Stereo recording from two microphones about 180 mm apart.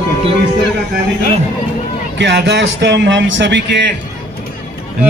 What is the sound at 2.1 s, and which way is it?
A man's voice, 80° right.